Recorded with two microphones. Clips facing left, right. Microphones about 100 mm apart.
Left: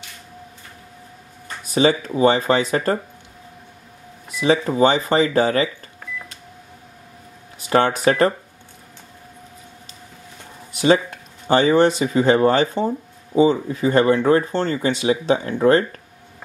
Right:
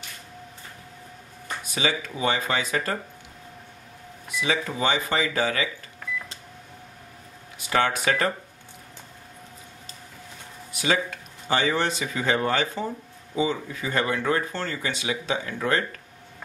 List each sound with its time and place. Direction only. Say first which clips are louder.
1.7 s speech: left 10 dB; 35° left (ahead or behind)
4.4 s speech: left 10 dB; 35° left (ahead or behind)
7.7 s speech: left 6 dB; 35° left (ahead or behind)
10.7 s speech: left 9 dB; 30° left (ahead or behind)